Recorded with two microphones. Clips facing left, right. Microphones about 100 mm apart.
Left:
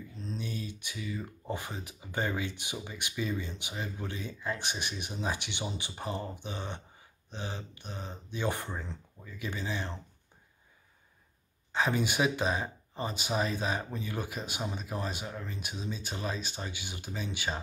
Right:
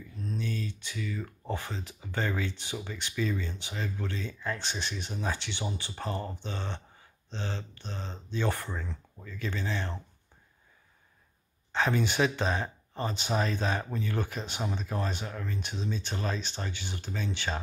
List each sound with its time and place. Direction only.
0.2 s speech: 20° left (ahead or behind)
11.7 s speech: 10° left (ahead or behind)